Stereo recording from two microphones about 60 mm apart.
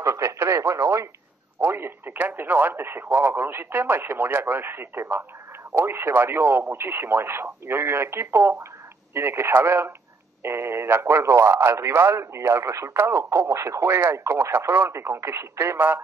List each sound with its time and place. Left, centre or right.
0.0 s speech: right
1.6 s speech: right
2.1 s speech: right
13.8 s speech: right